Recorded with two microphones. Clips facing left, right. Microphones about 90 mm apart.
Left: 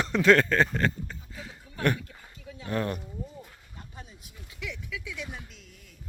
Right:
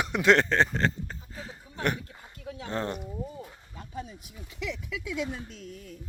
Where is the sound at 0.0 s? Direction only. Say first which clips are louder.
Left 1 dB; 15° right (ahead or behind); by 1.8 s 35° right (ahead or behind).